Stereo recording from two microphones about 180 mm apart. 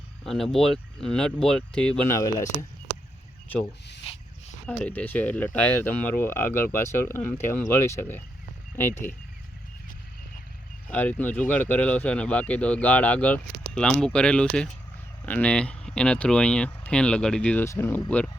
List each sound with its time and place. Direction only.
0.3 s speech: centre (ahead or behind)
2.0 s speech: 15° left (ahead or behind)
4.6 s speech: 5° left (ahead or behind)
10.8 s speech: 10° left (ahead or behind)